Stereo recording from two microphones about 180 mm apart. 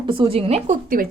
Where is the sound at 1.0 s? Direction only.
50° right (ahead or behind).